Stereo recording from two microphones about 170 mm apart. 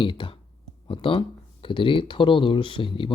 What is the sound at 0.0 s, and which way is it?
Speech, 30° left (ahead or behind).